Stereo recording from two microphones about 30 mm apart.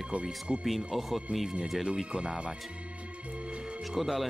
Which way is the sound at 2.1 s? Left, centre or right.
Right.